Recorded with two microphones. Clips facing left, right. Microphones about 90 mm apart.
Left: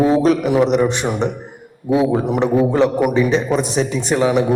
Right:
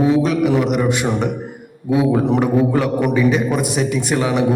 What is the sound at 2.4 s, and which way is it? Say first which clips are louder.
A man's voice: left 2 dB; 25° left (ahead or behind).